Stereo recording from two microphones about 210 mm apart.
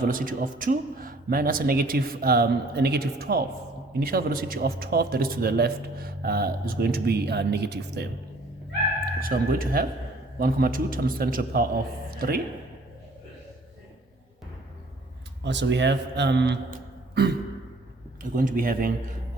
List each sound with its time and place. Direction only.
0.1 s speech: 40° right (ahead or behind)
9.2 s speech: 45° right (ahead or behind)
15.4 s speech: 55° right (ahead or behind)
16.7 s a sound: 50° right (ahead or behind)
18.2 s speech: 40° right (ahead or behind)